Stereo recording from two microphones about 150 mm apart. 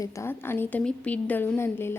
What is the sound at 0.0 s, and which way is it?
A woman's voice, 20° left (ahead or behind).